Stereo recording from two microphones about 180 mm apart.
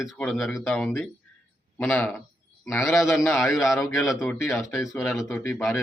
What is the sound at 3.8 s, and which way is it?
Speech, 15° left (ahead or behind).